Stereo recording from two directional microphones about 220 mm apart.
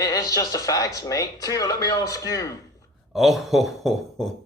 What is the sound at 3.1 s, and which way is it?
Speech, centre (ahead or behind).